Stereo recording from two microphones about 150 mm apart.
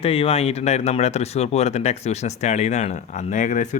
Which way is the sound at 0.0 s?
40° left (ahead or behind).